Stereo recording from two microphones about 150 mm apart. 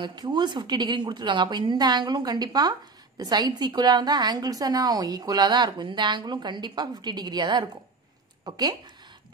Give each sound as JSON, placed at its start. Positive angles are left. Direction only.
{"t": 0.0, "sound": "a woman's voice", "side_deg": -30}